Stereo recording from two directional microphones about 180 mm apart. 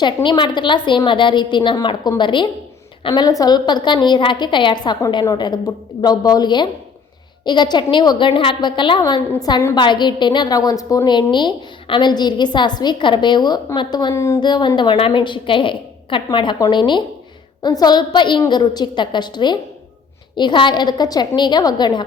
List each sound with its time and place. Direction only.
0.0 s a woman's voice: 25° left (ahead or behind)